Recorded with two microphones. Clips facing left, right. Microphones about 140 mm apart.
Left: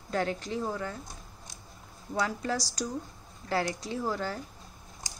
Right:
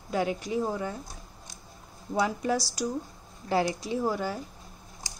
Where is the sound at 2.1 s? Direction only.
15° right (ahead or behind).